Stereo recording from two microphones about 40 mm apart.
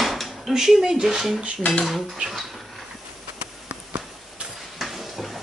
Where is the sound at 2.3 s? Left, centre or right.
Centre.